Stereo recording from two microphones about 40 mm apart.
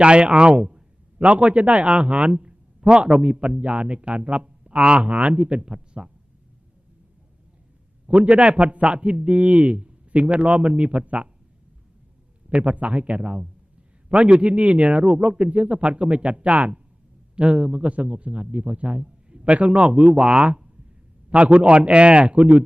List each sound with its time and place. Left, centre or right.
0.0 s speech: right
8.0 s speech: right
12.5 s a man's voice: right